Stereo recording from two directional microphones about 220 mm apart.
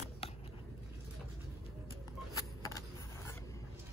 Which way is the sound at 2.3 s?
15° left (ahead or behind).